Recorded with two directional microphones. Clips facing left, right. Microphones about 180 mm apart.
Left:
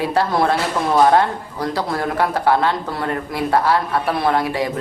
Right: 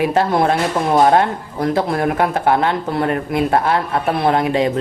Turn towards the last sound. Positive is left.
turn(degrees=-20)  # may be behind; listen again after turning